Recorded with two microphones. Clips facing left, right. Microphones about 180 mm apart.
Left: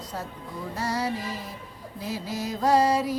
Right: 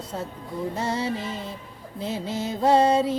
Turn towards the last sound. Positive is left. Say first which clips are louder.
# right 3 dB
turn(degrees=-25)  # may be behind; listen again after turning